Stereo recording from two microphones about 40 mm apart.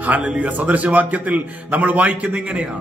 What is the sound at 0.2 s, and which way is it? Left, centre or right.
Speech, right.